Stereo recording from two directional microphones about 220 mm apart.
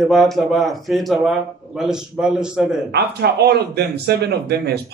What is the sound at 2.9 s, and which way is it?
Speech, 45° right (ahead or behind).